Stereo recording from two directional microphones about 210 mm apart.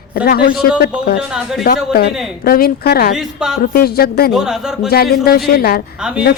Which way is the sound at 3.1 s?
Centre (ahead or behind).